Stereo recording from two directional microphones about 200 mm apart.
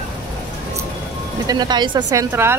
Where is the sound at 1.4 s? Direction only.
20° right (ahead or behind).